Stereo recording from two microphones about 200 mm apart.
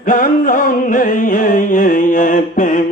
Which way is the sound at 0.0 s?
45° left (ahead or behind).